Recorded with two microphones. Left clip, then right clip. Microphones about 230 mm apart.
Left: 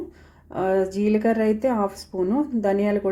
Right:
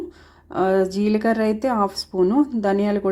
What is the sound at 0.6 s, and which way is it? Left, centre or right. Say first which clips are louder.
Speech: right 3 dB; centre.